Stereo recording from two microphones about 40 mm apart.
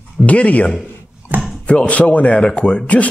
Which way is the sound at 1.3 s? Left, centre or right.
Right.